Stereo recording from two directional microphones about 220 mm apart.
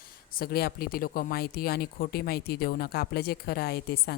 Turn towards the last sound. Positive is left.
turn(degrees=45)  # may be behind; listen again after turning